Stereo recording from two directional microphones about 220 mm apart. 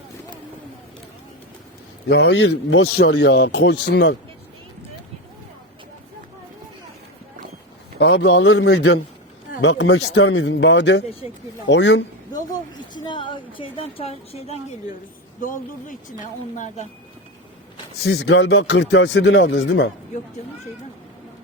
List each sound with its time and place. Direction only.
2.0 s speech: 50° left (ahead or behind)
7.9 s speech: 55° left (ahead or behind)
12.9 s a woman's voice: 20° left (ahead or behind)
18.0 s speech: 50° left (ahead or behind)
20.1 s speech: 30° left (ahead or behind)